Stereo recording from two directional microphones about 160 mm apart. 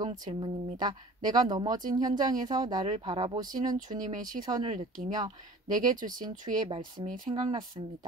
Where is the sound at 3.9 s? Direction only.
55° right (ahead or behind).